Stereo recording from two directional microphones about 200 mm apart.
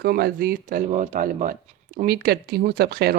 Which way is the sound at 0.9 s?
35° right (ahead or behind).